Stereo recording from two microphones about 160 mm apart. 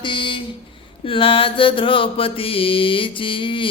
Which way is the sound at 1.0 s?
35° left (ahead or behind).